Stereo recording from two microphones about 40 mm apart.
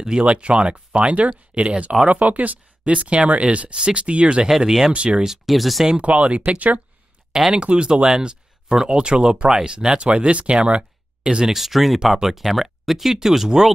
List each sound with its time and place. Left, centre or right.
0.2 s speech: right
2.0 s speech: right
4.5 s speech: centre
4.9 s speech: right
5.2 s speech: centre
5.9 s speech: right
7.5 s speech: right
11.4 s speech: centre